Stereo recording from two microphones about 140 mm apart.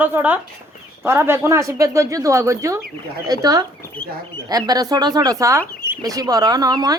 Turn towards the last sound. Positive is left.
turn(degrees=-25)  # may be behind; listen again after turning